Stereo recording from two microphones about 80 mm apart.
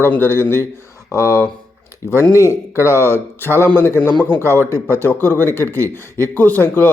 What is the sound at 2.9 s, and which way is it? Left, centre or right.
A man's voice, left.